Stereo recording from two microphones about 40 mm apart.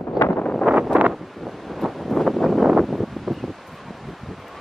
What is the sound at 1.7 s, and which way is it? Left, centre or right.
Wind noise, centre.